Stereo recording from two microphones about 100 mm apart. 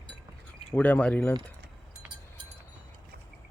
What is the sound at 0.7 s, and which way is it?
Speech, 15° left (ahead or behind).